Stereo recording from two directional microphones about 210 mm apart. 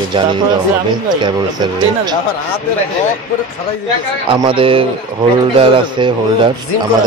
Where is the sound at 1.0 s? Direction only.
20° right (ahead or behind).